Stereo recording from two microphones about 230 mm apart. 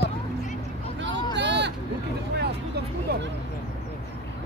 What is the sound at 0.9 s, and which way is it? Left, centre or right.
Vehicle, right.